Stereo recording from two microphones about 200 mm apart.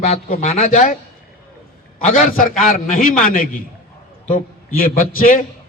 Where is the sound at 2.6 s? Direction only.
45° left (ahead or behind).